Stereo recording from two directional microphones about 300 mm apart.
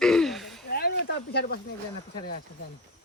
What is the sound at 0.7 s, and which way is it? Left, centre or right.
Speech, left.